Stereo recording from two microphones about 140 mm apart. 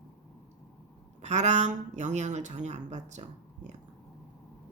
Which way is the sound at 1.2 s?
55° right (ahead or behind).